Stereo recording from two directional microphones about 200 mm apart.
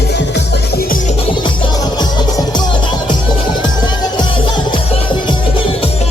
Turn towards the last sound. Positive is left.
turn(degrees=25)  # may be behind; listen again after turning